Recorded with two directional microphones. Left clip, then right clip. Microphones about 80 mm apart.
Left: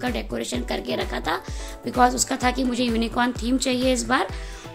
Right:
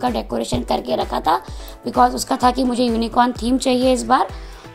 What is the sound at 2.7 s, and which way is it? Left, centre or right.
Speech, right.